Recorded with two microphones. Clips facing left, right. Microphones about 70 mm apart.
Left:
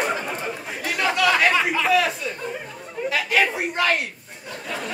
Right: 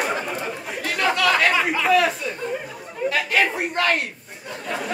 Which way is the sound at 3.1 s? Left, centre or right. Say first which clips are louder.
Even; centre.